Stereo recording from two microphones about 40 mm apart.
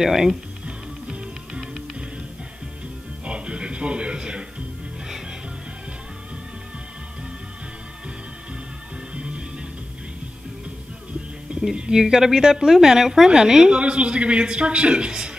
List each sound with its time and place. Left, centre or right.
0.0 s a woman's voice: centre
1.0 s music: centre
3.3 s a sound: right
9.1 s music: right
11.7 s a woman's voice: centre
13.7 s a woman's voice: right